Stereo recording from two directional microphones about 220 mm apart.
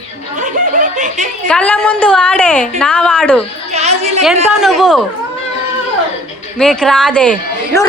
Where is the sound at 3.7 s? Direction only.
30° right (ahead or behind).